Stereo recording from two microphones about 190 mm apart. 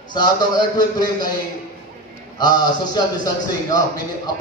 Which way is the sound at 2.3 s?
20° left (ahead or behind).